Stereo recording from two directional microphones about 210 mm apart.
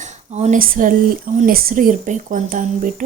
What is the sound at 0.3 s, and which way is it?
A woman's voice, 35° right (ahead or behind).